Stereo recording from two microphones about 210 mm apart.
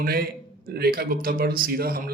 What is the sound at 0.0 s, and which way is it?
Speech, 45° right (ahead or behind).